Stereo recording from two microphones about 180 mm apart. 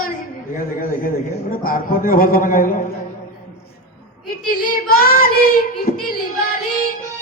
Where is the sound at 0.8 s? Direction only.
50° left (ahead or behind).